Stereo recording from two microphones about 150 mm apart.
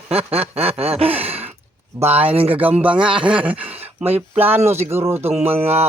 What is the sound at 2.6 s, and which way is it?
Speech, 10° right (ahead or behind).